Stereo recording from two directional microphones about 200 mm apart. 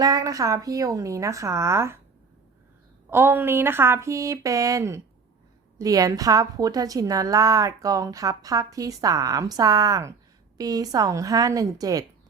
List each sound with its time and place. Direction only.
0.0 s a woman's voice: 15° right (ahead or behind)
3.1 s a woman's voice: 10° right (ahead or behind)